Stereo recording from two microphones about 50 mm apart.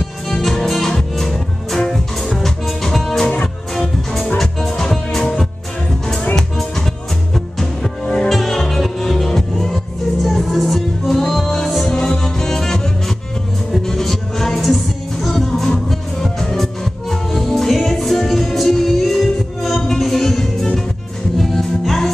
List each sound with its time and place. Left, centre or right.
0.3 s music: centre
7.3 s music: centre
8.3 s music: centre